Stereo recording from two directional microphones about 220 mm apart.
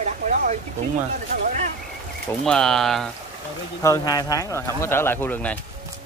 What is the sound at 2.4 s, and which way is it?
Speech, centre (ahead or behind).